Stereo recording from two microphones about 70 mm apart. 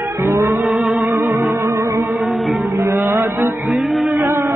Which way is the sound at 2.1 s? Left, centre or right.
Centre.